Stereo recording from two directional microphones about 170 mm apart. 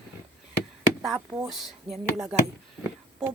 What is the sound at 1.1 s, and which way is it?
Speech, 15° right (ahead or behind).